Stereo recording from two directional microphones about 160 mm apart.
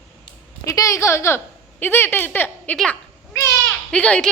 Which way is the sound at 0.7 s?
20° left (ahead or behind).